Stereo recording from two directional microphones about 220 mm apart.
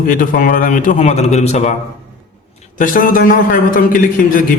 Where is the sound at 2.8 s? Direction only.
40° left (ahead or behind).